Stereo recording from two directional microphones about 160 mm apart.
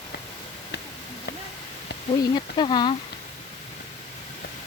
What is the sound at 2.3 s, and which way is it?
Speech, 30° left (ahead or behind).